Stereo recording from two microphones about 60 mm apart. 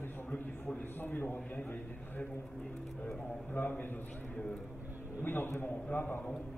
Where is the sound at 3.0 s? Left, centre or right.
Centre.